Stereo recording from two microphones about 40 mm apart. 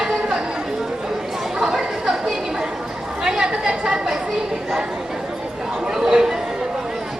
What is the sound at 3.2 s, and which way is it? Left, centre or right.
Chatter, centre.